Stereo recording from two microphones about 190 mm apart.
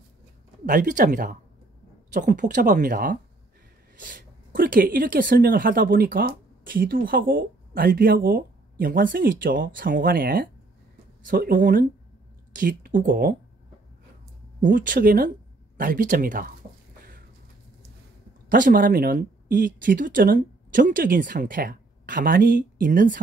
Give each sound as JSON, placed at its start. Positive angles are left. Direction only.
{"t": 0.7, "sound": "speech", "side_deg": -45}
{"t": 14.6, "sound": "speech", "side_deg": -45}
{"t": 18.5, "sound": "speech", "side_deg": -45}